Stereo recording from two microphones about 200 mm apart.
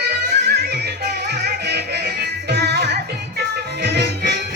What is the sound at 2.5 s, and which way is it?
Music, 55° right (ahead or behind).